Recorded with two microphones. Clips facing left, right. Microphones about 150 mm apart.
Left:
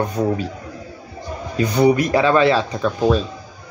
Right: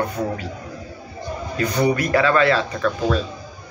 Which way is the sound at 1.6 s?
15° left (ahead or behind).